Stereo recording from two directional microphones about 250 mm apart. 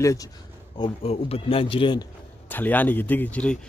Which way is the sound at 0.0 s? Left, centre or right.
Centre.